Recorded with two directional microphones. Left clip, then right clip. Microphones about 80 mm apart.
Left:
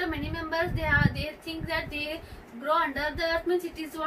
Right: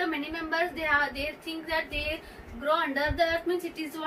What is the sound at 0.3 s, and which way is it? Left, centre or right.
A woman's voice, right.